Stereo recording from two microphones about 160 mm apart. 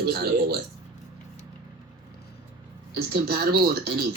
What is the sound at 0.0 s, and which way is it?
Speech, 75° right (ahead or behind).